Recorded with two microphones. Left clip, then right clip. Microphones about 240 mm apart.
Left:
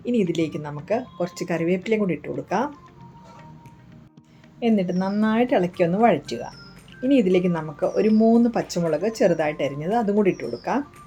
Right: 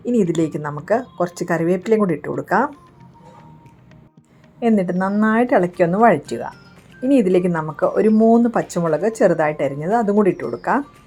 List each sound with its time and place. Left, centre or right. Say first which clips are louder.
0.3 s speech: right 5 dB; centre
4.6 s speech: right 5 dB; centre